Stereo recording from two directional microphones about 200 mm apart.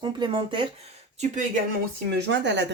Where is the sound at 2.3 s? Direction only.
60° right (ahead or behind).